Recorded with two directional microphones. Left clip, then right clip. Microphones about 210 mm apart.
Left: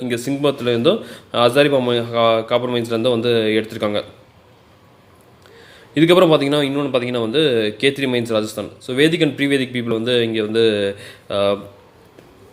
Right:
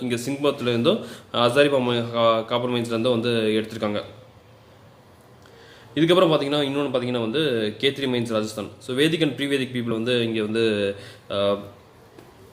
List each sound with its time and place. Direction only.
0.0 s a man's voice: 15° left (ahead or behind)
5.9 s a man's voice: 25° left (ahead or behind)